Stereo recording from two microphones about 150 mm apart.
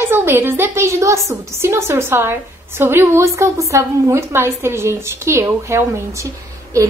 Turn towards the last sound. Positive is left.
turn(degrees=-20)  # may be behind; listen again after turning